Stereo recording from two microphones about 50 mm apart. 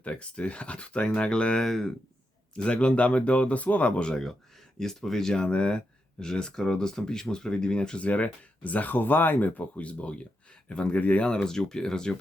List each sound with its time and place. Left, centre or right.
0.0 s speech: left; by 1.9 s centre
2.6 s speech: centre
4.8 s speech: centre; by 11.3 s left
11.4 s speech: centre